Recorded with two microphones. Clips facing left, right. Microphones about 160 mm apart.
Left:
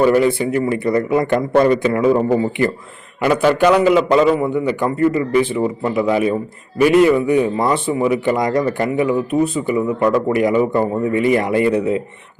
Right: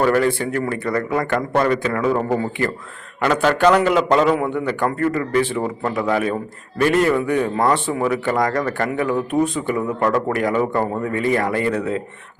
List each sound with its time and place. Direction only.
0.0 s a man's voice: 15° left (ahead or behind)